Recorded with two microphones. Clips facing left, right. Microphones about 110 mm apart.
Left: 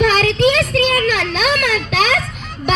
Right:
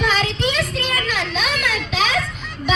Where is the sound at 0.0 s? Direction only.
60° left (ahead or behind).